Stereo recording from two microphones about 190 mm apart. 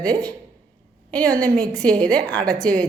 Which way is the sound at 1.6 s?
5° left (ahead or behind).